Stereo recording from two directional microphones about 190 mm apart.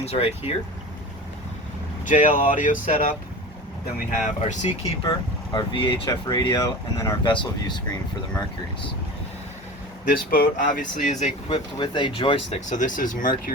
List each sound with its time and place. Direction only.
0.0 s speech: 30° left (ahead or behind)
2.0 s speech: 45° left (ahead or behind)
5.5 s speech: 25° left (ahead or behind)
10.1 s speech: 50° left (ahead or behind)
11.4 s speech: 25° left (ahead or behind); by 13.2 s 45° left (ahead or behind)